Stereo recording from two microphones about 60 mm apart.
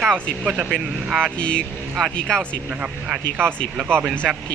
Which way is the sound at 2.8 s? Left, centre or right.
Centre.